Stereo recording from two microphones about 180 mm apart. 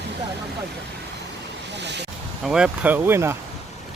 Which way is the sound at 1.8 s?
75° right (ahead or behind).